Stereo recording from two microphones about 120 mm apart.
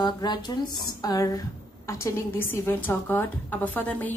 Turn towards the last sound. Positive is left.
turn(degrees=15)  # may be behind; listen again after turning